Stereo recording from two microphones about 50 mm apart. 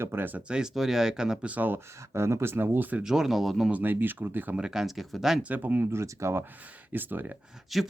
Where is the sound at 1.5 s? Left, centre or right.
Right.